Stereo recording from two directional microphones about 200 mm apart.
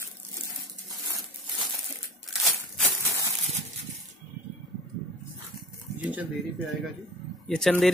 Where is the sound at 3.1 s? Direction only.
15° right (ahead or behind).